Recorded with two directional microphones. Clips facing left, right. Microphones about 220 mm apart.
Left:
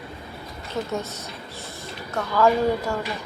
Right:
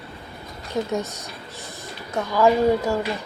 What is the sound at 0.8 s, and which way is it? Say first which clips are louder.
Speech: right 3 dB; 15° right (ahead or behind).